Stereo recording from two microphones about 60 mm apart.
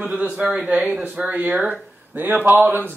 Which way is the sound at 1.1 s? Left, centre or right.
Right.